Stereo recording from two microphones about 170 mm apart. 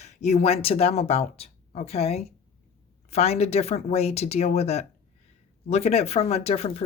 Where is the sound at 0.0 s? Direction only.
40° left (ahead or behind).